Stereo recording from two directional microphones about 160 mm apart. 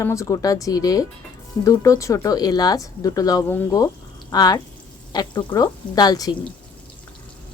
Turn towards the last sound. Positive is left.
turn(degrees=25)  # may be behind; listen again after turning